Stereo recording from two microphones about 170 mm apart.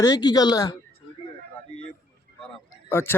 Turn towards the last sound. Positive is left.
turn(degrees=15)  # may be behind; listen again after turning